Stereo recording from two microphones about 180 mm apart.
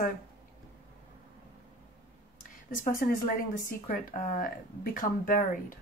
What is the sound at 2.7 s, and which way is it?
Speech, 50° left (ahead or behind).